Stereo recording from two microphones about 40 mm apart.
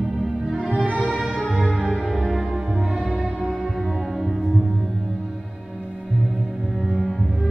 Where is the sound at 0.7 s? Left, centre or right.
Right.